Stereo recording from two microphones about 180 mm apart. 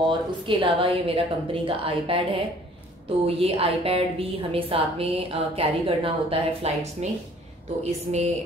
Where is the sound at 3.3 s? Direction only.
30° right (ahead or behind).